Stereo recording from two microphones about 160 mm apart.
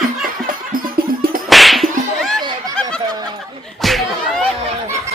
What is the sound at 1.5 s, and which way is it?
Whip, centre (ahead or behind).